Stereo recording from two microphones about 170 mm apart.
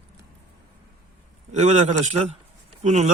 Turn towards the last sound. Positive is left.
turn(degrees=-45)  # may be behind; listen again after turning